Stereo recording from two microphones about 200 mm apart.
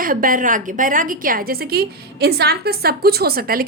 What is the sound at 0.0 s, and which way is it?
A woman's voice, 45° right (ahead or behind).